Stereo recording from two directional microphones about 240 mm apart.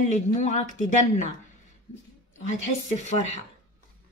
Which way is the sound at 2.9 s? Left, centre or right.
Left.